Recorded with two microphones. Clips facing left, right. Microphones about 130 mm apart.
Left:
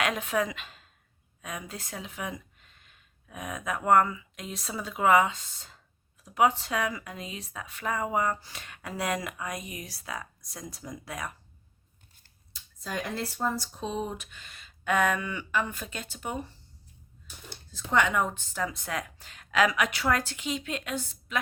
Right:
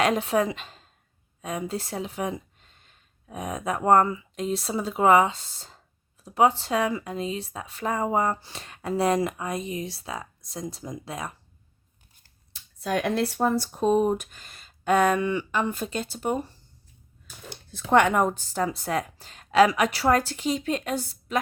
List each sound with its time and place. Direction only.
0.0 s a woman's voice: 30° right (ahead or behind)
12.8 s speech: 70° right (ahead or behind); by 16.5 s 40° right (ahead or behind)
17.5 s speech: 75° right (ahead or behind); by 21.3 s 35° right (ahead or behind)